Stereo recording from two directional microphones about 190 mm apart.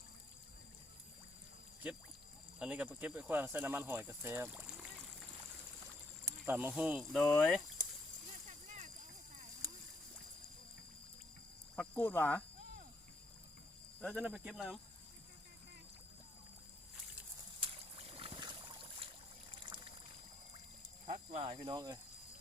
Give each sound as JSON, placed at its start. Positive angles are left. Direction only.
{"t": 1.8, "sound": "speech", "side_deg": -10}
{"t": 6.2, "sound": "speech", "side_deg": -10}
{"t": 8.4, "sound": "a sound", "side_deg": -40}
{"t": 11.8, "sound": "speech", "side_deg": 10}
{"t": 14.0, "sound": "speech", "side_deg": 5}
{"t": 17.6, "sound": "boat", "side_deg": -30}
{"t": 21.1, "sound": "a sound", "side_deg": -35}